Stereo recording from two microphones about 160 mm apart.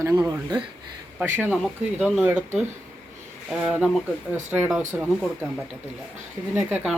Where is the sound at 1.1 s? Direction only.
15° right (ahead or behind).